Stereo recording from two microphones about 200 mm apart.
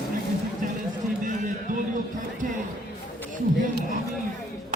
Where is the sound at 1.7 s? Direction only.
40° right (ahead or behind).